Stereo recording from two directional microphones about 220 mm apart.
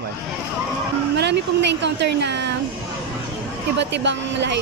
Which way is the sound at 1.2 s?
50° right (ahead or behind).